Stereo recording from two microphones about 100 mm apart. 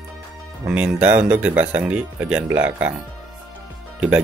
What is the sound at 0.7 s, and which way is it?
Speech, 15° right (ahead or behind).